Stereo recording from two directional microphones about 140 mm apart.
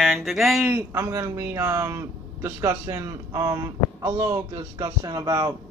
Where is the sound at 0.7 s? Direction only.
20° right (ahead or behind).